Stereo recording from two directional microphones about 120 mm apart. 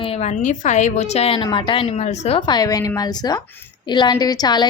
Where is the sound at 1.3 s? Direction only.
40° left (ahead or behind).